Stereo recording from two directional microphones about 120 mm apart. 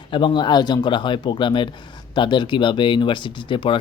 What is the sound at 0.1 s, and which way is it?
Speech, 40° left (ahead or behind).